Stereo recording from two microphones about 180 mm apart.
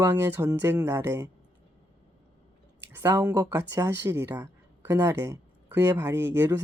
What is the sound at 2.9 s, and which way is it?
Speech, 15° right (ahead or behind).